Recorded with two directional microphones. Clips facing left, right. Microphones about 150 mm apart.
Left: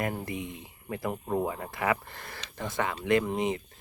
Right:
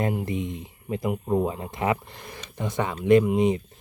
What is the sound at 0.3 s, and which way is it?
Speech, 20° right (ahead or behind).